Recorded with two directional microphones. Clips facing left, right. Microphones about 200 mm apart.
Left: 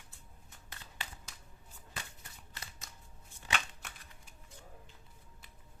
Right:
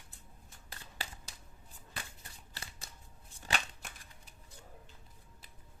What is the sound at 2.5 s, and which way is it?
Shuffling cards, 30° right (ahead or behind).